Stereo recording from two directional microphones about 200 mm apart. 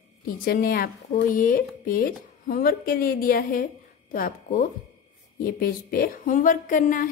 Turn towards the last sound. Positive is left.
turn(degrees=40)  # may be behind; listen again after turning